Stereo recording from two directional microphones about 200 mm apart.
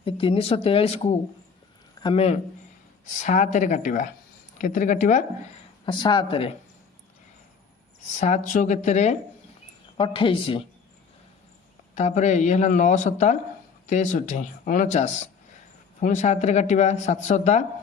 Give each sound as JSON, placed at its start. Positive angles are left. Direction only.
{"t": 0.0, "sound": "speech", "side_deg": 25}
{"t": 5.8, "sound": "speech", "side_deg": 25}
{"t": 8.2, "sound": "speech", "side_deg": 35}
{"t": 11.9, "sound": "speech", "side_deg": 35}